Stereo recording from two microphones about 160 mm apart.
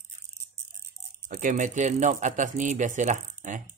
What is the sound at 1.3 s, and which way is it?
Speech, 55° right (ahead or behind).